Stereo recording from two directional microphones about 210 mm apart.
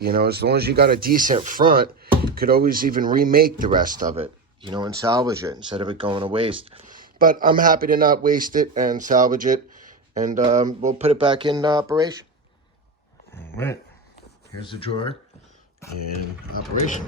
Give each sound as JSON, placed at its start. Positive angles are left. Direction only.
{"t": 0.0, "sound": "speech", "side_deg": -45}
{"t": 4.1, "sound": "speech", "side_deg": -25}
{"t": 6.8, "sound": "speech", "side_deg": -40}
{"t": 13.3, "sound": "speech", "side_deg": 10}
{"t": 14.6, "sound": "speech", "side_deg": 25}